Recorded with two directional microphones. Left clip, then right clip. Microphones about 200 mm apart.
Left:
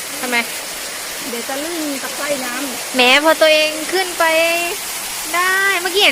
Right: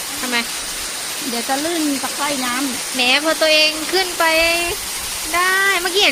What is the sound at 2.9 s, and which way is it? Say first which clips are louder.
Speech: left 5 dB; 25° left (ahead or behind).